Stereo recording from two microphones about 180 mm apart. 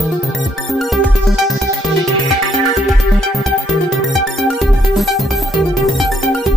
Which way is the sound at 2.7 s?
Centre (ahead or behind).